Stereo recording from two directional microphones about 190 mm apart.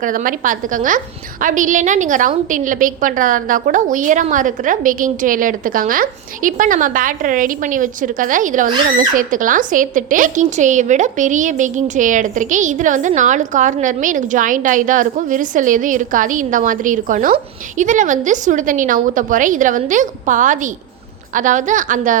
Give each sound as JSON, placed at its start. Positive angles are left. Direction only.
{"t": 0.0, "sound": "a woman's voice", "side_deg": -45}